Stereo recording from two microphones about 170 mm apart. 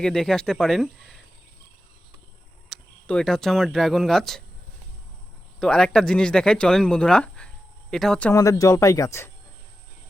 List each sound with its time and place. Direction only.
0.0 s speech: 5° left (ahead or behind)
2.6 s speech: 5° left (ahead or behind)
5.5 s speech: 5° left (ahead or behind)
8.3 s speech: 20° left (ahead or behind)